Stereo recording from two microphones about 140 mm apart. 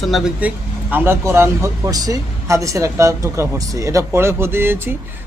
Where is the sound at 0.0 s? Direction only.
Centre (ahead or behind).